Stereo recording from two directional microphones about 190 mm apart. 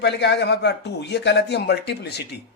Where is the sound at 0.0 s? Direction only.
65° left (ahead or behind).